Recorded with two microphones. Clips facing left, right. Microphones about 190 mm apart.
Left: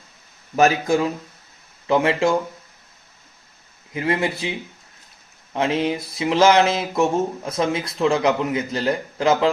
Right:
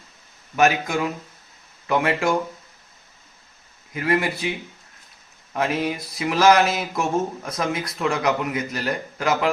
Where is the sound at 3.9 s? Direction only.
25° left (ahead or behind).